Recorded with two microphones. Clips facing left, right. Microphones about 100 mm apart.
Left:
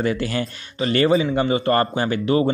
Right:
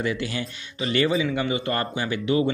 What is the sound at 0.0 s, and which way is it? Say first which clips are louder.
Speech: left 5 dB; 45° left (ahead or behind).